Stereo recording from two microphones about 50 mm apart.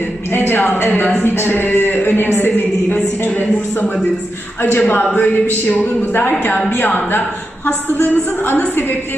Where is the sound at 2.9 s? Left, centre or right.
Left.